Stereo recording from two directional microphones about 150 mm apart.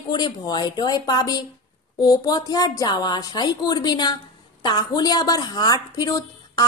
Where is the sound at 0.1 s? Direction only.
30° left (ahead or behind).